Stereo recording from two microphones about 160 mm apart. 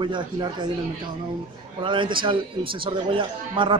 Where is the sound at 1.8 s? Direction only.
30° right (ahead or behind).